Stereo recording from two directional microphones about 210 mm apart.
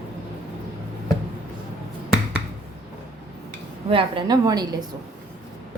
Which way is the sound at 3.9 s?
25° right (ahead or behind).